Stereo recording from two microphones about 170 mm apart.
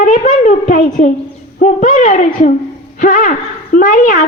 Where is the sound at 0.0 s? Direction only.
50° left (ahead or behind).